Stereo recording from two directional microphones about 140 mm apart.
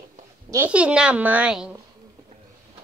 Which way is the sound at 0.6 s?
10° right (ahead or behind).